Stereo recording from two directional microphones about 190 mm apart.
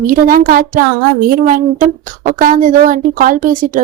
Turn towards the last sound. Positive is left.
turn(degrees=-45)  # may be behind; listen again after turning